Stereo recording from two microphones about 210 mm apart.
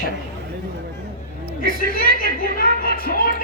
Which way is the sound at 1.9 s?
45° left (ahead or behind).